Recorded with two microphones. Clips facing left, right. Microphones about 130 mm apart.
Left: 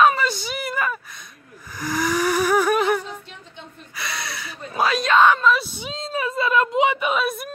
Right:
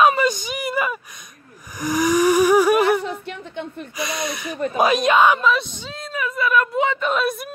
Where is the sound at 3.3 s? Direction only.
65° right (ahead or behind).